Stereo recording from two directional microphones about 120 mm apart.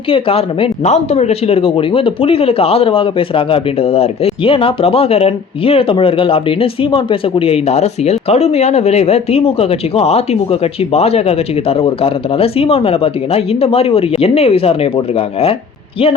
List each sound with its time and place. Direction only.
0.1 s speech: 50° left (ahead or behind)
0.9 s speech: 65° left (ahead or behind)